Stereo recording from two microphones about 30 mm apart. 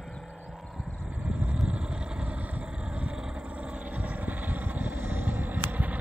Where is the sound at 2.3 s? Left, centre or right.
Right.